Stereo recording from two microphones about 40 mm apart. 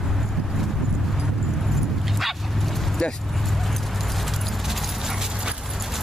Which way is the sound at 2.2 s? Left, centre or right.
Centre.